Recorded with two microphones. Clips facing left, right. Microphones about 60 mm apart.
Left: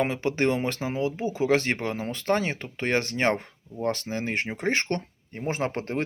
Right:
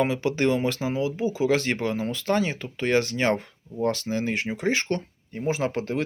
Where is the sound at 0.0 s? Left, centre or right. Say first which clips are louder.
Right 1 dB; left.